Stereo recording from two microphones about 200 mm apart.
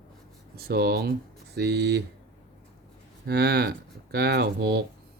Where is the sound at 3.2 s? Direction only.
55° right (ahead or behind).